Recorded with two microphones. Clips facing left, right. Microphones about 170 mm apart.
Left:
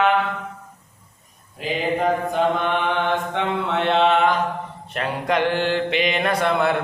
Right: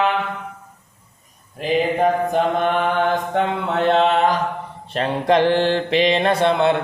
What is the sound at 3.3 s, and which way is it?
Mantra, 40° right (ahead or behind).